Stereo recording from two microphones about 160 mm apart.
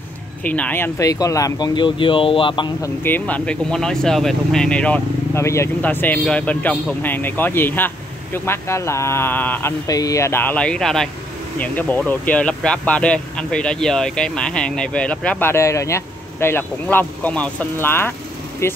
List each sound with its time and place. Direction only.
0.4 s speech: 10° left (ahead or behind); by 2.9 s 30° left (ahead or behind)
3.0 s speech: 10° left (ahead or behind)